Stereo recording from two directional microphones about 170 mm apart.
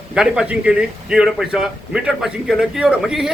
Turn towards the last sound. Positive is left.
turn(degrees=-5)  # may be behind; listen again after turning